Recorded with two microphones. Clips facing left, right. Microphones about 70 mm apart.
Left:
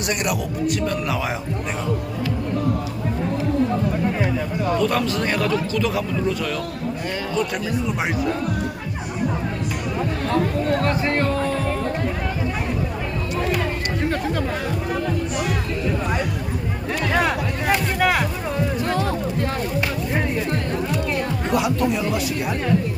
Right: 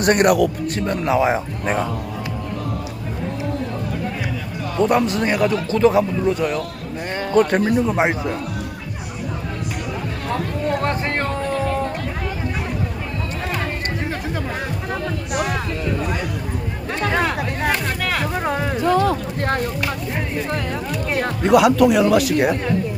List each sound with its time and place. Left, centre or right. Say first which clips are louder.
0.0 s speech: right 9 dB; right
0.7 s a man's voice: right 3 dB; right
4.8 s a man's voice: right 8 dB; right
5.7 s a man's voice: right 6 dB; right
7.3 s speech: right 10 dB; right
7.9 s a man's voice: right 3 dB; right
10.8 s music: left 1 dB; right
17.7 s music: left 5 dB; centre
18.4 s music: right 2 dB; right
21.1 s speech: right 11 dB; right